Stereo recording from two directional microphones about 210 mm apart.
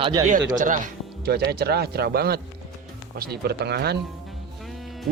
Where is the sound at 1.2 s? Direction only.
50° right (ahead or behind).